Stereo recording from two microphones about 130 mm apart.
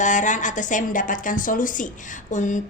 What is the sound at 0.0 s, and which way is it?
A woman's voice, 75° left (ahead or behind).